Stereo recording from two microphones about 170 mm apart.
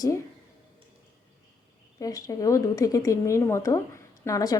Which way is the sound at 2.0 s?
20° left (ahead or behind).